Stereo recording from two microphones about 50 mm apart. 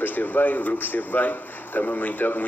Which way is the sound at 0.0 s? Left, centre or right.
Left.